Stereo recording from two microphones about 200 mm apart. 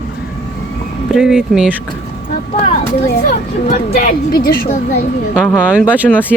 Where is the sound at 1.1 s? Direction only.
Centre (ahead or behind).